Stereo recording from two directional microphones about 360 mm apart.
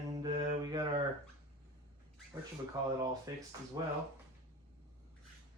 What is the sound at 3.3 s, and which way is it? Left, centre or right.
Mantra, centre.